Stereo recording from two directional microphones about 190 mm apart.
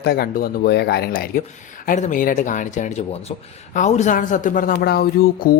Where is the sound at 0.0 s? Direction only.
55° left (ahead or behind).